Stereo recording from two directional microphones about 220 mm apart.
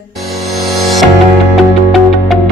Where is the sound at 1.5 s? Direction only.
Centre (ahead or behind).